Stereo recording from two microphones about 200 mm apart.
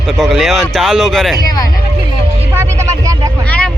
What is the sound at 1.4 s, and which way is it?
Speech, 20° left (ahead or behind).